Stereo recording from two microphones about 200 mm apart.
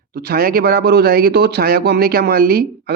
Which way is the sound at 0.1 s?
50° right (ahead or behind).